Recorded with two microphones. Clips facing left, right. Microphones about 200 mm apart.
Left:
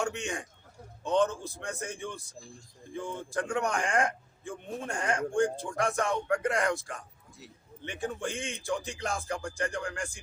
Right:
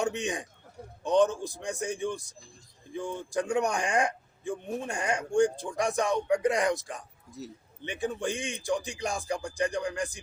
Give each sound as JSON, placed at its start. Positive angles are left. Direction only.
{"t": 0.0, "sound": "a man's voice", "side_deg": -15}
{"t": 8.0, "sound": "a man's voice", "side_deg": -15}